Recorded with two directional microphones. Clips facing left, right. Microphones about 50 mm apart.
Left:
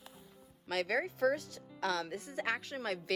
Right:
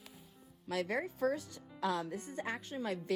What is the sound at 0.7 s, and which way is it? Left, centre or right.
Speech, left.